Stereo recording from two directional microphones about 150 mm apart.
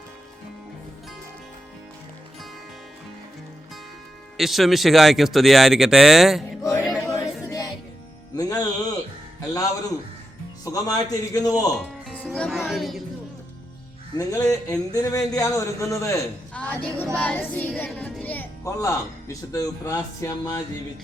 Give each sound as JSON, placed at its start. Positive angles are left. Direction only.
{"t": 4.4, "sound": "speech", "side_deg": 0}
{"t": 8.4, "sound": "music", "side_deg": 20}
{"t": 9.5, "sound": "speech", "side_deg": 25}
{"t": 12.0, "sound": "speech", "side_deg": 10}
{"t": 14.2, "sound": "speech", "side_deg": 20}
{"t": 16.6, "sound": "speech", "side_deg": 10}
{"t": 17.2, "sound": "music", "side_deg": 10}
{"t": 17.7, "sound": "speech", "side_deg": 10}